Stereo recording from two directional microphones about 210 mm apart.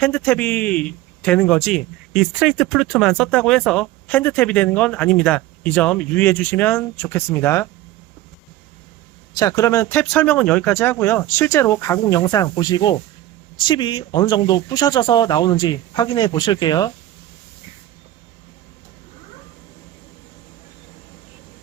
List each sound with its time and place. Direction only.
0.0 s a man's voice: 5° left (ahead or behind)
9.4 s a man's voice: 15° left (ahead or behind)